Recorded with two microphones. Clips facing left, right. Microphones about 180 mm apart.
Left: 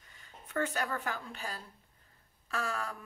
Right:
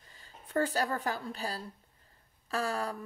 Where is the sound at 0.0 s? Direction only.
30° right (ahead or behind).